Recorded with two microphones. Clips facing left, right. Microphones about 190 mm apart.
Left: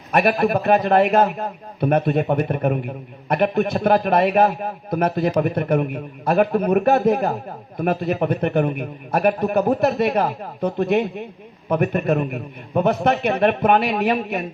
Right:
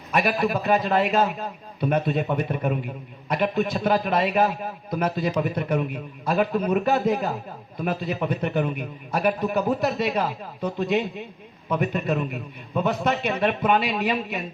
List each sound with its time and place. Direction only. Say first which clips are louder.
0.1 s a man's voice: left 5 dB; 55° left (ahead or behind)